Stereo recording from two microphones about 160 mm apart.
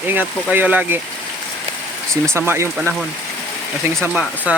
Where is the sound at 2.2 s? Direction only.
15° right (ahead or behind).